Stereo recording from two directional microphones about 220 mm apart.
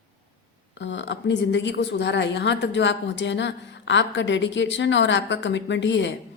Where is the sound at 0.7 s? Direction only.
55° left (ahead or behind).